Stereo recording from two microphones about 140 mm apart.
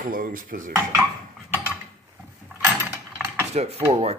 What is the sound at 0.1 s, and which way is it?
Dishes, 85° right.